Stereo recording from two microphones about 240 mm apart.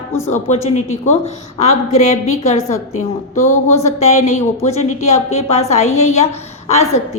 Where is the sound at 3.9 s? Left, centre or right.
Left.